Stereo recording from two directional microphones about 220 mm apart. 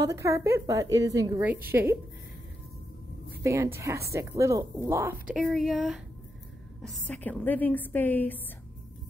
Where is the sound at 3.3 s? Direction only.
15° right (ahead or behind); by 8.4 s 10° left (ahead or behind).